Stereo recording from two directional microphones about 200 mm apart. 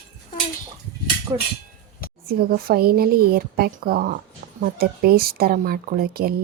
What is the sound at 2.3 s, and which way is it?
Speech, 50° right (ahead or behind).